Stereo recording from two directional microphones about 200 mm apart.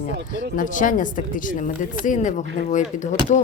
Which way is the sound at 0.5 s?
40° left (ahead or behind).